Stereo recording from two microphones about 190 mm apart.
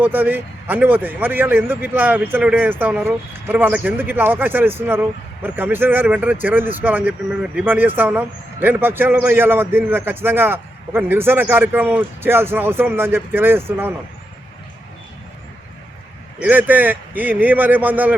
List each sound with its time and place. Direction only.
0.0 s speech: 10° right (ahead or behind)
16.4 s speech: 10° right (ahead or behind)